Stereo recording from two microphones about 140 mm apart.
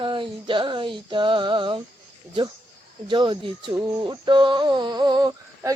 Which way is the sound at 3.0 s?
35° right (ahead or behind).